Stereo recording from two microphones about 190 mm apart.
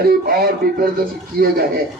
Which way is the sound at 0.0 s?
55° right (ahead or behind).